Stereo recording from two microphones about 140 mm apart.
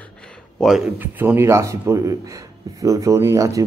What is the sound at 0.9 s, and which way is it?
Speech, 15° right (ahead or behind).